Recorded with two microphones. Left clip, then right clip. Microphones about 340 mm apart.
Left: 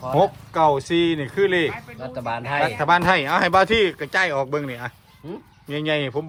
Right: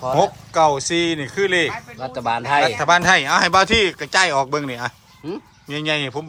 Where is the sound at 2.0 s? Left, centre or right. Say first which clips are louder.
Right 6 dB; right.